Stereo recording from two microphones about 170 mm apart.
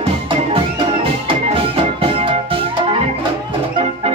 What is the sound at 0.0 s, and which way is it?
Music, 30° right (ahead or behind).